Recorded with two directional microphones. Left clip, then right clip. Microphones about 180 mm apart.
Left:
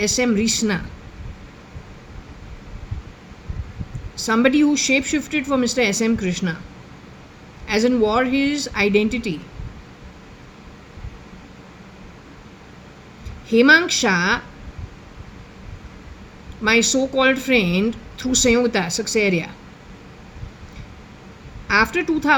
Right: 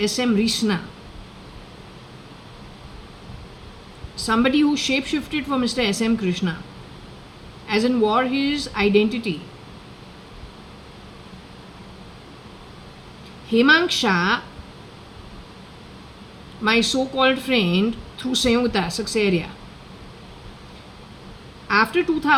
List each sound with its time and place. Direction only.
0.0 s speech: 30° left (ahead or behind)
4.3 s speech: 30° left (ahead or behind)
7.7 s speech: 30° left (ahead or behind)
13.5 s speech: 30° left (ahead or behind)
16.6 s speech: 30° left (ahead or behind)
21.7 s speech: 30° left (ahead or behind)